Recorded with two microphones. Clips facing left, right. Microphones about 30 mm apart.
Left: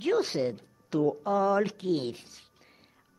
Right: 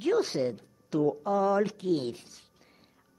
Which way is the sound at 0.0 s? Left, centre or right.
Centre.